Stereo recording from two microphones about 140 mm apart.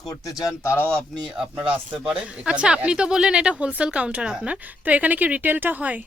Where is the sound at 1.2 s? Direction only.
5° right (ahead or behind).